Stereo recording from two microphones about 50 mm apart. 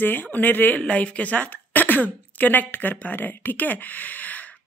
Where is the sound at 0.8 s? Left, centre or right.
Left.